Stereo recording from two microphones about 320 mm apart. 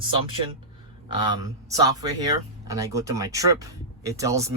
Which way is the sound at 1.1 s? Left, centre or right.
Centre.